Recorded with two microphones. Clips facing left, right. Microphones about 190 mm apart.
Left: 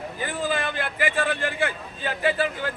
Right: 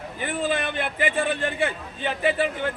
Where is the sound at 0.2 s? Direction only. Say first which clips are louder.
Right 2 dB; 25° right (ahead or behind).